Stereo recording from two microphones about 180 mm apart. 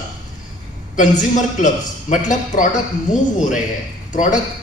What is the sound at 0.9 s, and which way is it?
A man's voice, 45° left (ahead or behind).